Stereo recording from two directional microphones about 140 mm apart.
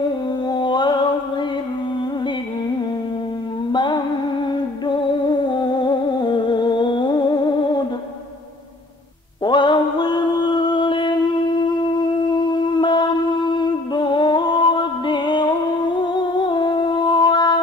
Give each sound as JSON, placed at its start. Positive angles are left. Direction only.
{"t": 0.5, "sound": "music", "side_deg": 30}
{"t": 3.7, "sound": "music", "side_deg": 35}
{"t": 9.4, "sound": "music", "side_deg": 35}